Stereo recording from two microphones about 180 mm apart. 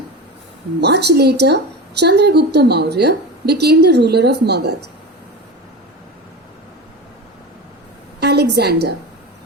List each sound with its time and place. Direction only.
0.8 s a woman's voice: 70° right (ahead or behind)
8.2 s a woman's voice: 65° right (ahead or behind)